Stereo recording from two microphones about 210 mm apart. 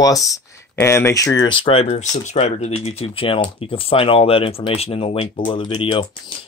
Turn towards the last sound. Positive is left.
turn(degrees=25)  # may be behind; listen again after turning